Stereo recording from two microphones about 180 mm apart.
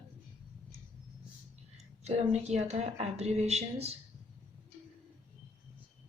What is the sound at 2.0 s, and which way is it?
A woman's voice, 35° right (ahead or behind).